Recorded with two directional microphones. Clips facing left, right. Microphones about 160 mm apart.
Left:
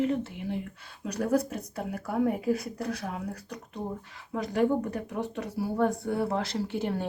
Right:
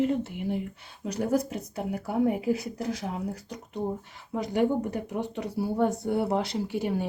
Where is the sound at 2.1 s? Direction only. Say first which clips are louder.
Right 1 dB; 20° right (ahead or behind).